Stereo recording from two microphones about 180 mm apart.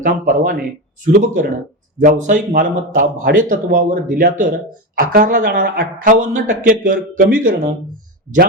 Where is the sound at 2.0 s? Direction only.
45° right (ahead or behind).